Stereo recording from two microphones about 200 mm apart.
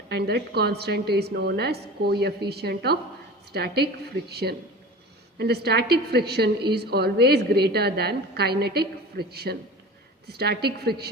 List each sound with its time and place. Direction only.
0.1 s a woman's voice: 55° right (ahead or behind)